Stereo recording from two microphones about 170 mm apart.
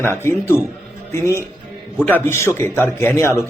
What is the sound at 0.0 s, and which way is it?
A man's voice, 15° left (ahead or behind).